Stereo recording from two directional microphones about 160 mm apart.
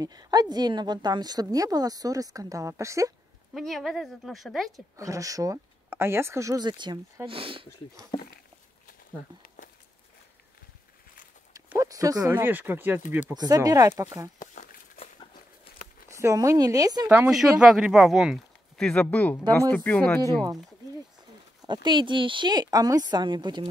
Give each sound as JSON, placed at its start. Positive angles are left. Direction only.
{"t": 0.0, "sound": "a woman's voice", "side_deg": -25}
{"t": 3.5, "sound": "speech", "side_deg": 0}
{"t": 4.7, "sound": "a woman's voice", "side_deg": -20}
{"t": 8.1, "sound": "a sound", "side_deg": 30}
{"t": 11.7, "sound": "speech", "side_deg": -20}
{"t": 13.3, "sound": "a woman's voice", "side_deg": -25}
{"t": 14.4, "sound": "a sound", "side_deg": 55}
{"t": 16.1, "sound": "a woman's voice", "side_deg": -20}
{"t": 17.1, "sound": "speech", "side_deg": -5}
{"t": 19.4, "sound": "a woman's voice", "side_deg": -20}
{"t": 19.7, "sound": "speech", "side_deg": 10}
{"t": 21.5, "sound": "a woman's voice", "side_deg": -30}